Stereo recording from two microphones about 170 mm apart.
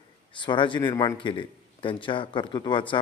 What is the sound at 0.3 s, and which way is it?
A man's voice, 30° left (ahead or behind).